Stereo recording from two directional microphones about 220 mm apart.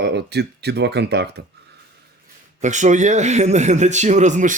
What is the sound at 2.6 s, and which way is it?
A man's voice, 35° right (ahead or behind).